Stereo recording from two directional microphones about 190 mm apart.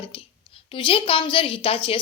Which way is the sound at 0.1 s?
30° left (ahead or behind).